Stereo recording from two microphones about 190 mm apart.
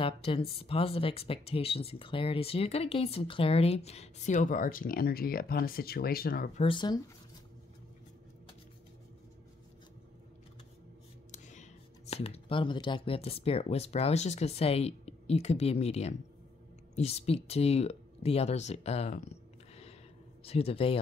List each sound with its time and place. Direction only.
0.0 s speech: 30° left (ahead or behind); by 6.6 s 50° left (ahead or behind)
6.6 s speech: 25° left (ahead or behind)
11.3 s a sound: 40° left (ahead or behind)
12.1 s speech: 30° left (ahead or behind)